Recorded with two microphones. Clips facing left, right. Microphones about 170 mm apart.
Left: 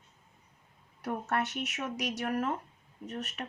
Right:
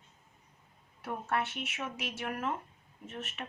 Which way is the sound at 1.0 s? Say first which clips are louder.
Left 2 dB; 40° left (ahead or behind).